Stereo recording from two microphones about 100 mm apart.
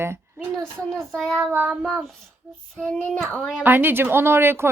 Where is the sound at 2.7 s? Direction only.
10° left (ahead or behind).